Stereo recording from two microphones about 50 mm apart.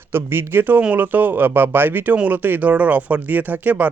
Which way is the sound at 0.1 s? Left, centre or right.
Right.